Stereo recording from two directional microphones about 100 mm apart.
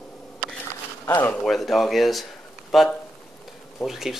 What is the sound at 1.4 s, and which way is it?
Speech, centre (ahead or behind).